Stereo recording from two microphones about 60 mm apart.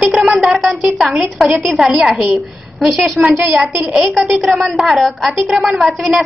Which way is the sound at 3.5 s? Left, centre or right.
Right.